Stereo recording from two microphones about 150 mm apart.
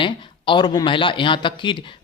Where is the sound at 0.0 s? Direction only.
35° left (ahead or behind).